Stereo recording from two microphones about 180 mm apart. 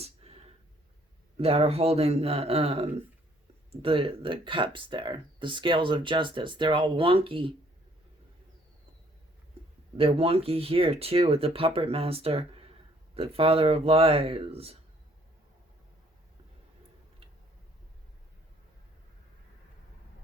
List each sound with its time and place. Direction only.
0.0 s a sound: 35° right (ahead or behind)
1.4 s speech: 35° right (ahead or behind)
10.0 s speech: 35° right (ahead or behind)